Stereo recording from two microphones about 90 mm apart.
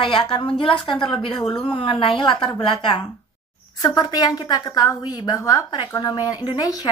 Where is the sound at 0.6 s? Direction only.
70° left (ahead or behind).